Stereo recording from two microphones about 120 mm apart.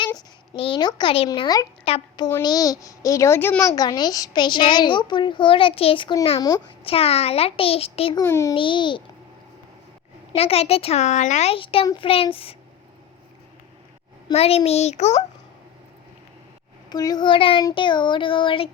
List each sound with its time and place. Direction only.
0.5 s child singing: 45° left (ahead or behind)
1.3 s a child's voice: 30° left (ahead or behind)
1.9 s child singing: 50° left (ahead or behind)
2.4 s a child's voice: 30° left (ahead or behind)
3.6 s a child's voice: 35° left (ahead or behind); by 8.1 s 55° left (ahead or behind)
8.2 s a child's voice: 25° left (ahead or behind)
8.5 s child singing: 45° left (ahead or behind)
10.3 s a child's voice: 55° left (ahead or behind); by 11.5 s 75° left (ahead or behind)
11.5 s child singing: 50° left (ahead or behind)
14.3 s a child's voice: 55° left (ahead or behind)
16.9 s a child's voice: 35° left (ahead or behind)
17.7 s child singing: 40° left (ahead or behind)